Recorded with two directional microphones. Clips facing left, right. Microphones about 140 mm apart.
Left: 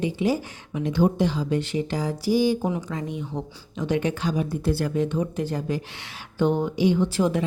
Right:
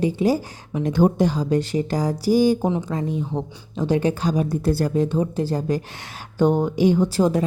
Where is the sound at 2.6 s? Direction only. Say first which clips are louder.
Right 4 dB; 35° right (ahead or behind).